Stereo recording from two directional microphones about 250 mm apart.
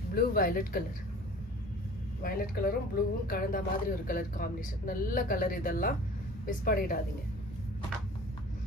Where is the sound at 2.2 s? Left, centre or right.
Left.